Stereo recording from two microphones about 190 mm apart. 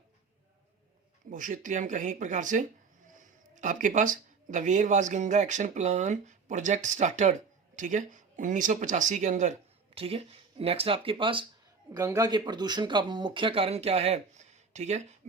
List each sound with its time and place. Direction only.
1.3 s speech: 45° right (ahead or behind); by 11.4 s 25° right (ahead or behind)
11.9 s speech: 15° right (ahead or behind); by 15.0 s 35° right (ahead or behind)